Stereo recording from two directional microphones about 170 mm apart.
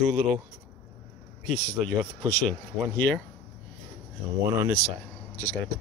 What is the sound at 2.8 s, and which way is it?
Speech, 10° left (ahead or behind).